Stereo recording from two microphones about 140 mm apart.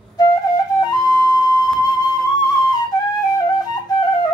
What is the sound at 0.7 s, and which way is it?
Flute, 25° left (ahead or behind).